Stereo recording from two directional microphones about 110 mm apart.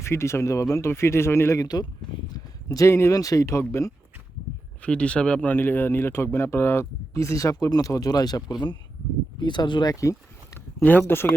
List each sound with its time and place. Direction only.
0.0 s speech: 25° left (ahead or behind)
1.6 s speech: 35° left (ahead or behind)
2.6 s speech: 25° left (ahead or behind)
4.8 s speech: 10° left (ahead or behind); by 9.9 s 45° left (ahead or behind)
9.9 s a sound: 30° left (ahead or behind)
10.8 s speech: 20° left (ahead or behind)